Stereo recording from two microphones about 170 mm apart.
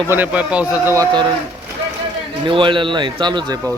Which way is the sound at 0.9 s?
20° right (ahead or behind).